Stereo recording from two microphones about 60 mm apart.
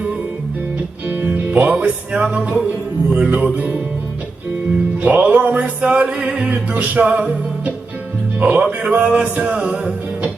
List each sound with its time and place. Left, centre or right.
1.0 s music: right
5.0 s music: right